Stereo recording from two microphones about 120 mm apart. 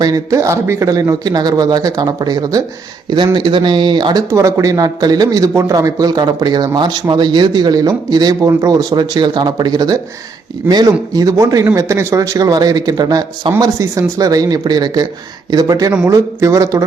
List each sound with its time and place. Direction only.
0.0 s a man's voice: 30° right (ahead or behind)
4.3 s a man's voice: 25° right (ahead or behind)